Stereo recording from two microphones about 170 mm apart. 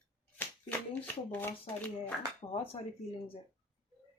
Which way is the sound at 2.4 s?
30° left (ahead or behind).